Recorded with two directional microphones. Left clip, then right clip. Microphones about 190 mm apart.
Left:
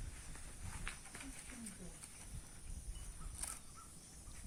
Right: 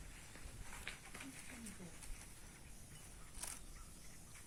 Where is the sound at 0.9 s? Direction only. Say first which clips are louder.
Left 1 dB; 25° left (ahead or behind).